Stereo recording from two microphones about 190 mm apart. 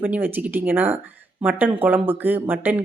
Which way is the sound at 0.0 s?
10° right (ahead or behind).